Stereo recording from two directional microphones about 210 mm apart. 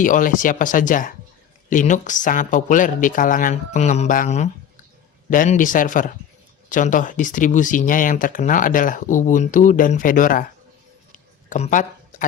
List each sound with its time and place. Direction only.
0.0 s speech: 40° left (ahead or behind)
11.4 s speech: 35° left (ahead or behind)